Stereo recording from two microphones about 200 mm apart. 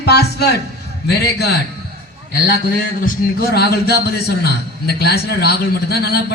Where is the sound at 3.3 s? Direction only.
50° left (ahead or behind).